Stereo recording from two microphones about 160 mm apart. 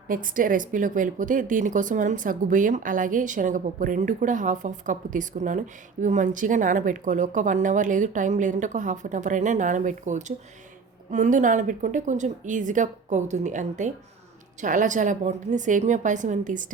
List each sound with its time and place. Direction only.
0.1 s a woman's voice: 60° right (ahead or behind)